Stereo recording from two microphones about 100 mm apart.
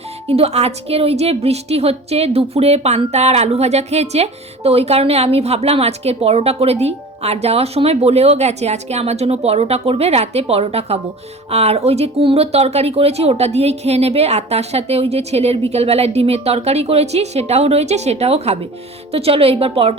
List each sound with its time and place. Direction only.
0.3 s a woman's voice: 85° right
19.1 s a woman's voice: 75° right (ahead or behind)